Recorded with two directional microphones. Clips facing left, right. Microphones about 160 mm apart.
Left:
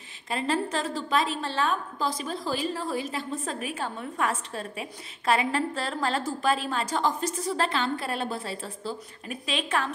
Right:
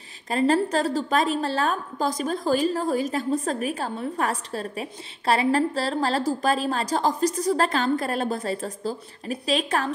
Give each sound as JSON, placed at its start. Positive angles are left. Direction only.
{"t": 0.3, "sound": "a woman's voice", "side_deg": -40}